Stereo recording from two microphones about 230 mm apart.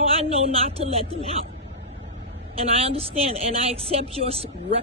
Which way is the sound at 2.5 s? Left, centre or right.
Right.